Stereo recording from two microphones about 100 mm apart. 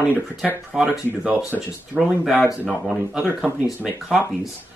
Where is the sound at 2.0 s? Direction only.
5° right (ahead or behind).